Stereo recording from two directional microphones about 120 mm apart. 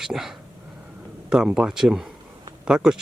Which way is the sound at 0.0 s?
5° right (ahead or behind).